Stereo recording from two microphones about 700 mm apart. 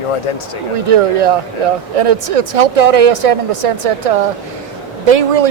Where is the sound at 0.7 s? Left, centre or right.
Right.